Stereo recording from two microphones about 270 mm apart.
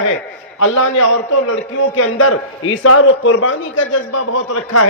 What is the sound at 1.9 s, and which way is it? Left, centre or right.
A man's voice, left.